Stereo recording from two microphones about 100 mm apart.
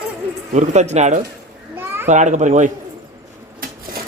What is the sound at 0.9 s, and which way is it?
Speech, 90° right.